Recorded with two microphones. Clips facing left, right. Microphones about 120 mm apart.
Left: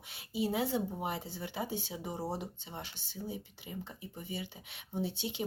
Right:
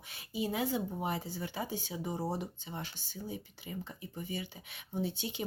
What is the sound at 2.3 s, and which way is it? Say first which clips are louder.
Speech: right 2 dB; 25° left (ahead or behind).